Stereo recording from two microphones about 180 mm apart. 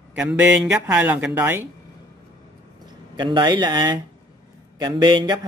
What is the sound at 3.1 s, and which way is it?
Speech, 25° right (ahead or behind).